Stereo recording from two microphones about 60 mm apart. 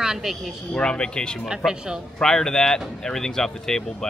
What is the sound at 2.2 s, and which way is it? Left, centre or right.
Speech, centre.